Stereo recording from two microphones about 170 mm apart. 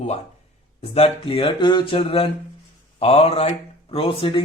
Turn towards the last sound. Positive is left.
turn(degrees=30)  # may be behind; listen again after turning